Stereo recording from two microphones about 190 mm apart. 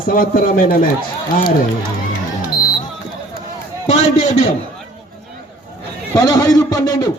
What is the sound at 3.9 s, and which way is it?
Speech, 30° left (ahead or behind).